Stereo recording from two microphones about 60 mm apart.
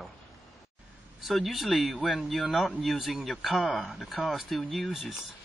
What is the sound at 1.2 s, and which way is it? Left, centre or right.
Speech, centre.